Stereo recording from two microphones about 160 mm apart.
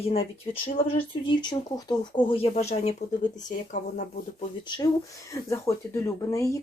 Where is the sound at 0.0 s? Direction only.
40° left (ahead or behind).